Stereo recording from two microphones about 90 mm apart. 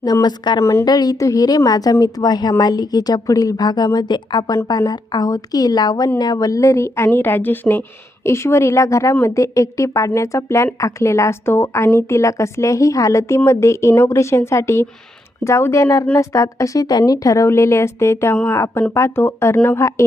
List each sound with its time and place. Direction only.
0.0 s a woman's voice: 45° left (ahead or behind)
0.6 s a woman's voice: 30° left (ahead or behind)
0.9 s a woman's voice: 45° left (ahead or behind); by 20.1 s 30° left (ahead or behind)